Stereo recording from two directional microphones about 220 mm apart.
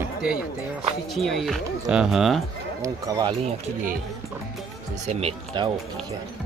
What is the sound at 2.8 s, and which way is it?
Speech, 15° right (ahead or behind).